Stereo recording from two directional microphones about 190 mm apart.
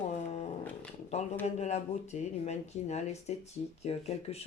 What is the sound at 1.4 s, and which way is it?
Speech, 35° left (ahead or behind).